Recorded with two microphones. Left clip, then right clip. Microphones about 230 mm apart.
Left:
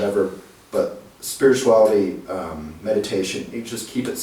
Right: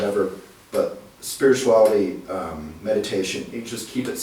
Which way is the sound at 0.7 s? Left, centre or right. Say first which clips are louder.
Left 1 dB; centre.